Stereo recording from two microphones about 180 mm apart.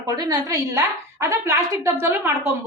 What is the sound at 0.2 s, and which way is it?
A woman's voice, 20° right (ahead or behind).